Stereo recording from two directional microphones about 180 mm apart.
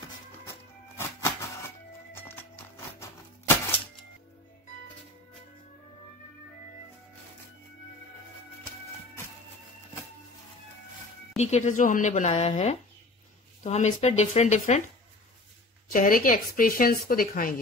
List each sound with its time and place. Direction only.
0.5 s music: 15° left (ahead or behind)
11.3 s speech: 40° left (ahead or behind)
15.9 s speech: 50° left (ahead or behind)